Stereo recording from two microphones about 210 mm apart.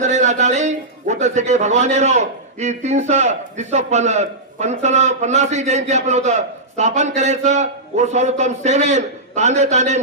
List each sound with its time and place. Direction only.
0.0 s a man's voice: 35° right (ahead or behind)